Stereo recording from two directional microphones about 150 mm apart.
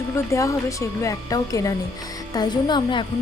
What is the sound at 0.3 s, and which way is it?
A woman's voice, 20° left (ahead or behind).